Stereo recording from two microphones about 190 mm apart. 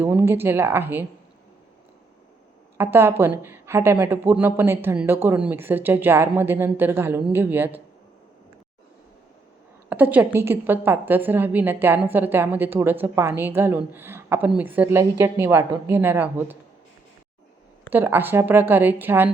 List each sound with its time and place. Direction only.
0.0 s a woman's voice: 10° right (ahead or behind)
2.7 s a woman's voice: 15° right (ahead or behind)
9.9 s a woman's voice: 10° right (ahead or behind)
17.8 s a woman's voice: 10° right (ahead or behind)